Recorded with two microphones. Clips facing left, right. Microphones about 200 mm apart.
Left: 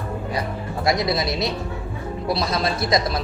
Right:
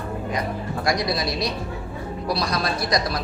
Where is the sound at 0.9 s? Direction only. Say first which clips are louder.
Left 3 dB; 25° left (ahead or behind).